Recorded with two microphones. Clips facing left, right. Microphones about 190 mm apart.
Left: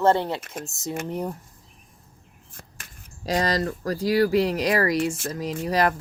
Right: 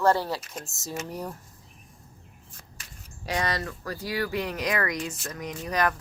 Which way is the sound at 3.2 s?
35° left (ahead or behind).